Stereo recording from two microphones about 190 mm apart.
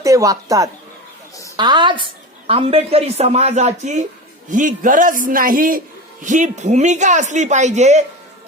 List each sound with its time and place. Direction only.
0.0 s a woman's voice: 15° right (ahead or behind); by 8.0 s 35° right (ahead or behind)